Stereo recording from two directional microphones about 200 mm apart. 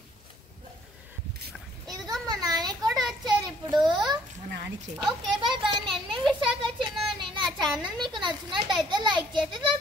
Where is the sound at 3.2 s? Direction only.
20° right (ahead or behind).